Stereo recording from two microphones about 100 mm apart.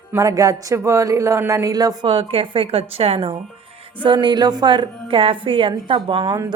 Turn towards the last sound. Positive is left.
turn(degrees=-40)  # may be behind; listen again after turning